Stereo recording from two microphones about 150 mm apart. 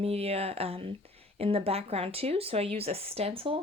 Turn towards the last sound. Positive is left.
turn(degrees=-40)  # may be behind; listen again after turning